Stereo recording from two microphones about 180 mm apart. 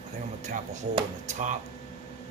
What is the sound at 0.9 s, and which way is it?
Speech, 40° right (ahead or behind).